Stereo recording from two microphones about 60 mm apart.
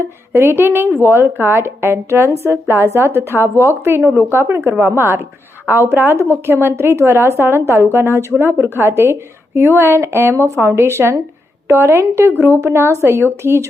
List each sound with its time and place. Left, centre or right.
0.0 s a woman's voice: right